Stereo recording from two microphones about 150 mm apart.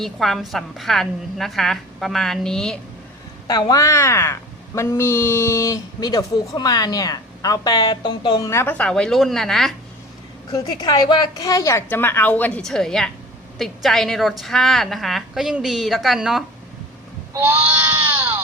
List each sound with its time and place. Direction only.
0.0 s a woman's voice: centre (ahead or behind)
3.4 s speech: 25° left (ahead or behind)
8.4 s a woman's voice: 15° left (ahead or behind)
10.5 s a woman's voice: 25° left (ahead or behind); by 16.4 s centre (ahead or behind)